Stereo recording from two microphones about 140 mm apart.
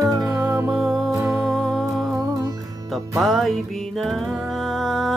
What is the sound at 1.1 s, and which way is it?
Music, 20° right (ahead or behind).